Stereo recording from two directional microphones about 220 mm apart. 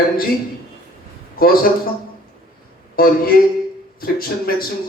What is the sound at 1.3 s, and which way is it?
Speech, 40° left (ahead or behind).